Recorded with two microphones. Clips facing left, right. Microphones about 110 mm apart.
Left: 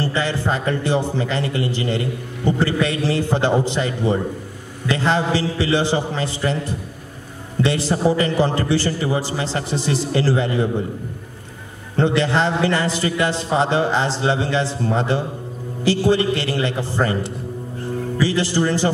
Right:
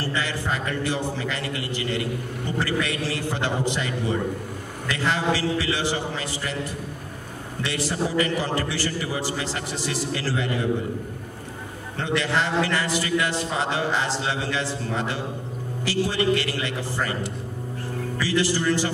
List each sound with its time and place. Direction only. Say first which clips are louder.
0.0 s a man's voice: left 6 dB; 25° left (ahead or behind)
7.6 s a man's voice: left 8 dB; 30° left (ahead or behind)
12.2 s a man's voice: left 1 dB; 30° left (ahead or behind)